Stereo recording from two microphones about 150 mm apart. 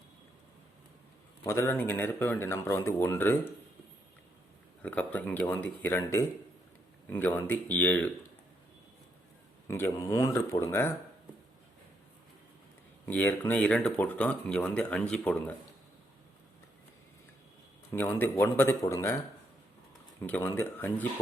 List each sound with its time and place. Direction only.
1.5 s speech: 15° left (ahead or behind)
4.8 s speech: 10° left (ahead or behind)
9.6 s speech: 15° left (ahead or behind)
13.1 s speech: 10° left (ahead or behind)
17.9 s a man's voice: 15° left (ahead or behind)
20.2 s speech: 10° left (ahead or behind)